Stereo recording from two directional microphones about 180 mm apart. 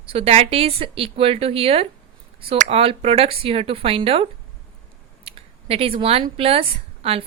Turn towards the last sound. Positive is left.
turn(degrees=-30)  # may be behind; listen again after turning